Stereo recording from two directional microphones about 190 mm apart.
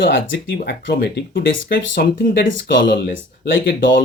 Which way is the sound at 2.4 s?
85° left.